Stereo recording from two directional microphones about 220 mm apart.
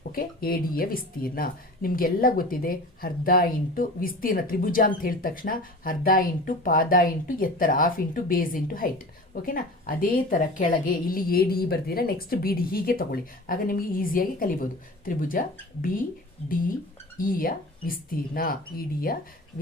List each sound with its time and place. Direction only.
0.1 s speech: 40° left (ahead or behind)
17.2 s speech: 40° left (ahead or behind)